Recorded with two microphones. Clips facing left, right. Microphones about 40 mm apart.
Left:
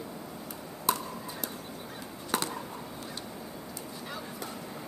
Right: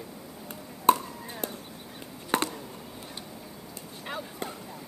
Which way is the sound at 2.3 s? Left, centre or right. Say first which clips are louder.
Right 4 dB; right.